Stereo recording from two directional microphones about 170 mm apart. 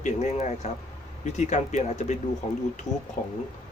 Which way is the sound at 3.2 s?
50° left (ahead or behind).